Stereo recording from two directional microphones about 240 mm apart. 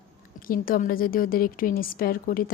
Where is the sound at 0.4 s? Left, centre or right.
Left.